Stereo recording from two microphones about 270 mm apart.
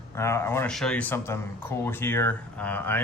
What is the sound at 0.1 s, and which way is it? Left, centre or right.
Speech, centre.